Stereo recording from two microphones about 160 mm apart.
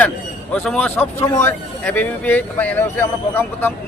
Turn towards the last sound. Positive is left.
turn(degrees=15)  # may be behind; listen again after turning